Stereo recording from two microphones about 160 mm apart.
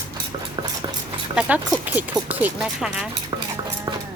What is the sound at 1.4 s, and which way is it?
A woman's voice, 10° right (ahead or behind).